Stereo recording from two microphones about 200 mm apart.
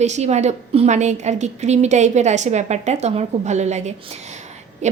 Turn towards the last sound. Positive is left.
turn(degrees=-35)  # may be behind; listen again after turning